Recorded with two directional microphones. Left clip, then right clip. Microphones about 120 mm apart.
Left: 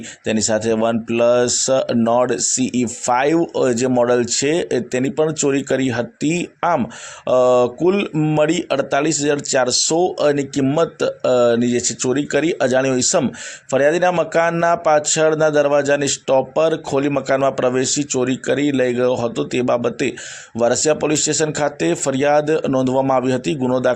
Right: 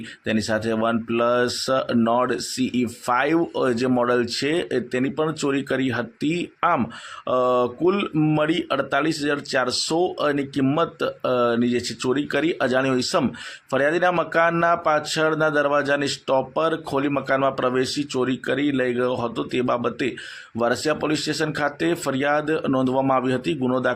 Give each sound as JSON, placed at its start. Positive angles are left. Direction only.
{"t": 0.3, "sound": "speech", "side_deg": 25}
{"t": 8.1, "sound": "speech", "side_deg": 20}
{"t": 8.4, "sound": "speech", "side_deg": 30}